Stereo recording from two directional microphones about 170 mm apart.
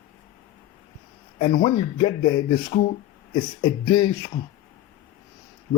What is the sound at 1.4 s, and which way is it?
Speech, 40° left (ahead or behind).